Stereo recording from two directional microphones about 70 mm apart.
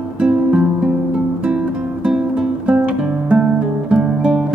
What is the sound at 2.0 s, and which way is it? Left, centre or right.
Music, centre.